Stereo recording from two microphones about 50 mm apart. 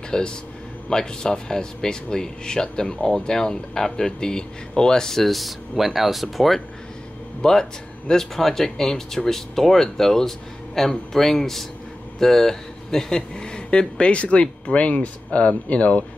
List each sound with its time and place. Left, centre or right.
0.1 s speech: centre
7.4 s speech: centre